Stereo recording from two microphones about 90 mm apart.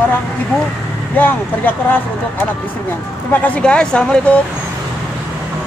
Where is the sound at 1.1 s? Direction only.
20° left (ahead or behind).